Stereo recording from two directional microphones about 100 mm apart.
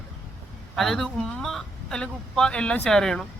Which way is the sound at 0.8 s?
5° left (ahead or behind).